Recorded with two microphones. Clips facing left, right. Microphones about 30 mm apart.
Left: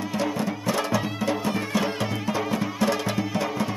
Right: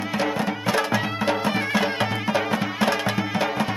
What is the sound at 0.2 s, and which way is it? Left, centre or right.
Music, right.